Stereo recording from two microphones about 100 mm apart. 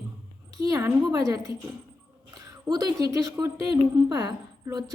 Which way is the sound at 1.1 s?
35° right (ahead or behind).